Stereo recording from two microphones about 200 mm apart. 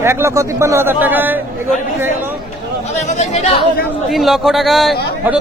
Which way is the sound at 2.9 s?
35° left (ahead or behind).